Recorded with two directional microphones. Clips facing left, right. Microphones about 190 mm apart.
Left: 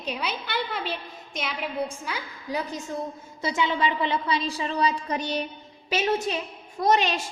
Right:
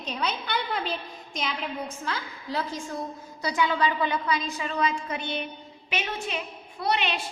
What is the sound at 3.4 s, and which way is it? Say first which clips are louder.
A woman's voice: even; 25° left (ahead or behind).